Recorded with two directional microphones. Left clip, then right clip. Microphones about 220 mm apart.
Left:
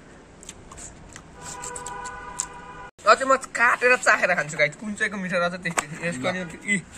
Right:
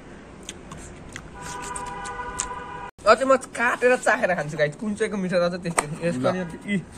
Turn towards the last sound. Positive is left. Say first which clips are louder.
# left 3 dB
turn(degrees=-10)  # may be behind; listen again after turning